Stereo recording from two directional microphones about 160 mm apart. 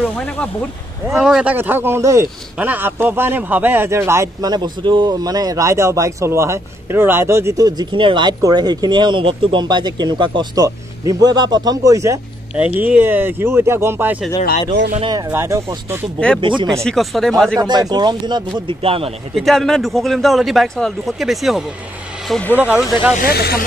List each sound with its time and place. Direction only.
1.1 s a man's voice: 5° right (ahead or behind)
12.5 s speech: 10° right (ahead or behind)
14.7 s speech: 90° right
15.0 s a man's voice: 25° right (ahead or behind)
16.3 s speech: 30° right (ahead or behind)
16.8 s speech: centre (ahead or behind)
17.6 s a man's voice: 25° right (ahead or behind)
19.3 s speech: centre (ahead or behind)
22.3 s speech: 10° left (ahead or behind)
22.6 s speech: 5° right (ahead or behind)
23.2 s speech: 75° left (ahead or behind)